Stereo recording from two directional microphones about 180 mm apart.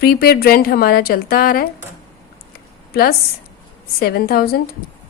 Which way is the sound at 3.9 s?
55° left (ahead or behind).